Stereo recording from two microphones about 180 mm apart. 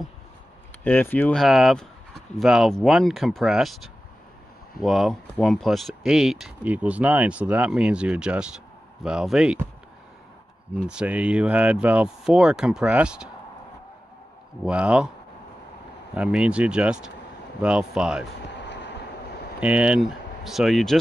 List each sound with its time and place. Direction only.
0.8 s speech: 10° left (ahead or behind)
10.8 s speech: 5° right (ahead or behind)
14.6 s speech: 5° right (ahead or behind)
16.2 s speech: 5° right (ahead or behind)
18.5 s vehicle: 75° left (ahead or behind)
19.6 s speech: 5° right (ahead or behind)